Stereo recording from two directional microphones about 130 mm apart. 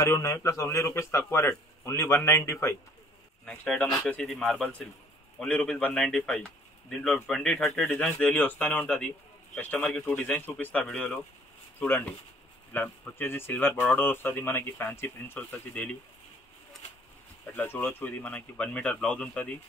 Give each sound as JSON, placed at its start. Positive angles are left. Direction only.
{"t": 0.0, "sound": "a man's voice", "side_deg": 20}
{"t": 3.4, "sound": "speech", "side_deg": 10}
{"t": 12.7, "sound": "speech", "side_deg": 15}
{"t": 17.5, "sound": "speech", "side_deg": 15}